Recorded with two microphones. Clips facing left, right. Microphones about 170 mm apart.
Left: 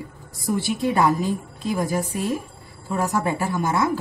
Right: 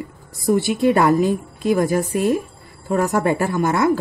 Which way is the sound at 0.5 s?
65° right (ahead or behind).